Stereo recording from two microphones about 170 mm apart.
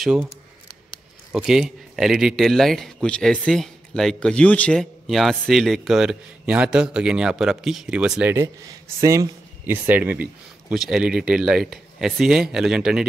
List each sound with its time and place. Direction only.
0.0 s speech: centre (ahead or behind)
1.3 s speech: 5° right (ahead or behind)